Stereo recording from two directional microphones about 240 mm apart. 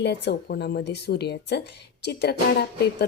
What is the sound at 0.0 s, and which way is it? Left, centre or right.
A woman's voice, left.